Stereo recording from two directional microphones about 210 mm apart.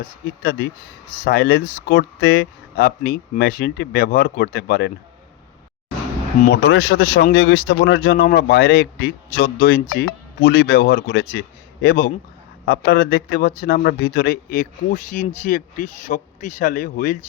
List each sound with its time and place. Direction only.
0.0 s speech: 45° left (ahead or behind)
6.4 s speech: 50° left (ahead or behind)